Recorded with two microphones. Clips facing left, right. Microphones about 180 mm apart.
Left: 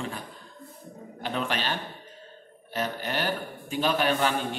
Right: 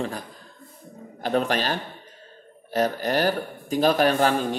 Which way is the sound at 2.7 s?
40° right (ahead or behind).